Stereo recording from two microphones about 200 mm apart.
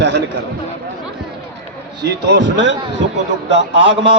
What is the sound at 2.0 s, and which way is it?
Speech, 60° right (ahead or behind).